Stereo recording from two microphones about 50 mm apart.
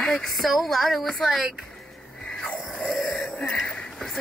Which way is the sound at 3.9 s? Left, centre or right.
Centre.